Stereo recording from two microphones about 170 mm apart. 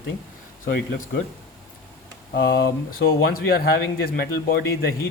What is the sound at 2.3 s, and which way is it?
Speech, 80° left.